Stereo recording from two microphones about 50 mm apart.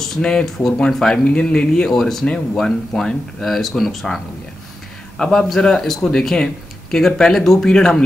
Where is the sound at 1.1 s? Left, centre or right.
Left; by 4.2 s centre.